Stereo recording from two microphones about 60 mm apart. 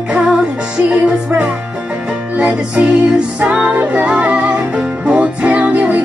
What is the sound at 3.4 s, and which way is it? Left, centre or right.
Music, centre.